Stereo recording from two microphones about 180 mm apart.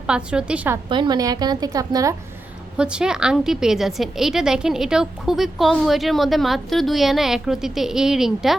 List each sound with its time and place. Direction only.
0.1 s a woman's voice: 5° right (ahead or behind)
0.9 s a woman's voice: 25° right (ahead or behind)
2.7 s a woman's voice: 5° right (ahead or behind)